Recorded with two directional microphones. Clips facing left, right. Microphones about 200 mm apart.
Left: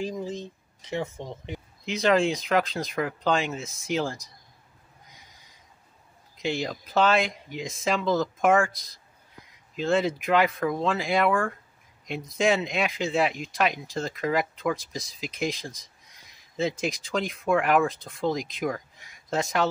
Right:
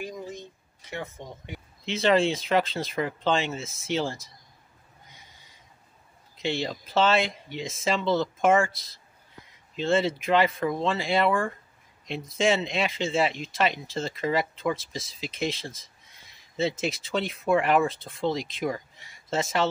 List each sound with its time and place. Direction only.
0.8 s speech: 15° left (ahead or behind)
1.9 s speech: centre (ahead or behind)
6.4 s speech: centre (ahead or behind)
9.8 s speech: centre (ahead or behind)